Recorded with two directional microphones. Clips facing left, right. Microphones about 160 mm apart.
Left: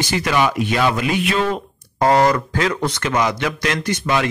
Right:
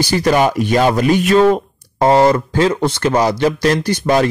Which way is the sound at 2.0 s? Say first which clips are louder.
Right 4 dB; 25° right (ahead or behind).